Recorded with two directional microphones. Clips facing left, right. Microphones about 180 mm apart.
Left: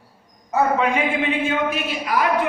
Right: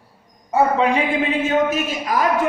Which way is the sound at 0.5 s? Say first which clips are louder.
Right 2 dB; 35° right (ahead or behind).